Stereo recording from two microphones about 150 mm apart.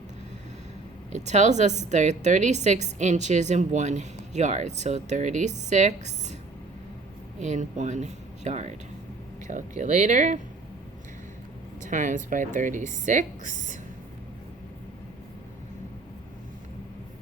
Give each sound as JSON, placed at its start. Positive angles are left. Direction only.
{"t": 1.1, "sound": "a woman's voice", "side_deg": -50}
{"t": 7.3, "sound": "a woman's voice", "side_deg": -50}
{"t": 11.9, "sound": "a woman's voice", "side_deg": -55}